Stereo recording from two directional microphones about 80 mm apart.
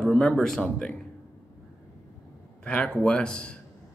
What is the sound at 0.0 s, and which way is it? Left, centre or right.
Speech, centre.